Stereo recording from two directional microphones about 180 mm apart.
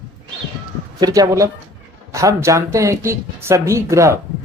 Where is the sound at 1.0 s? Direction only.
20° right (ahead or behind).